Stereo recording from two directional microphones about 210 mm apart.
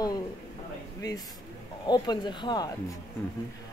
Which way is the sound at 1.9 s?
20° left (ahead or behind).